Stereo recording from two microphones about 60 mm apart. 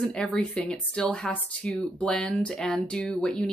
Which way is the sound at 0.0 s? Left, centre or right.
Centre.